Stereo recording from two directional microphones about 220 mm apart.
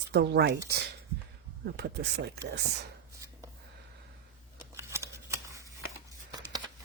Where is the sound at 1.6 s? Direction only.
45° right (ahead or behind).